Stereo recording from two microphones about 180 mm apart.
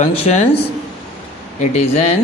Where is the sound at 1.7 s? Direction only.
35° left (ahead or behind).